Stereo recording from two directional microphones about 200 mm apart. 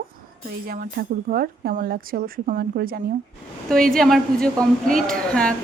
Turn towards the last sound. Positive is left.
turn(degrees=5)  # may be behind; listen again after turning